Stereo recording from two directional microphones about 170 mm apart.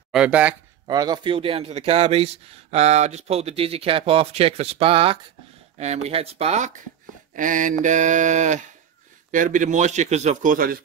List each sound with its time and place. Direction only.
0.1 s speech: 5° right (ahead or behind)
0.8 s speech: 25° right (ahead or behind); by 6.7 s 40° right (ahead or behind)
7.3 s a man's voice: 50° right (ahead or behind)